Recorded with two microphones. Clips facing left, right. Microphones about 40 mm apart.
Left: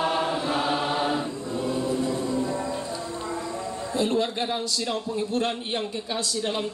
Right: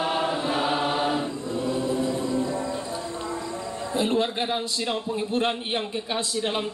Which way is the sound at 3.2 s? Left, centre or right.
Centre.